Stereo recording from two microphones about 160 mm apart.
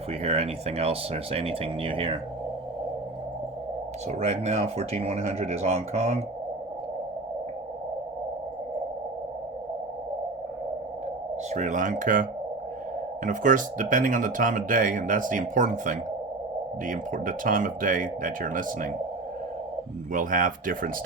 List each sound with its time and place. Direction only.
0.1 s speech: 40° right (ahead or behind)
4.2 s speech: 45° right (ahead or behind)
11.5 s speech: 50° right (ahead or behind)
20.1 s speech: 55° right (ahead or behind)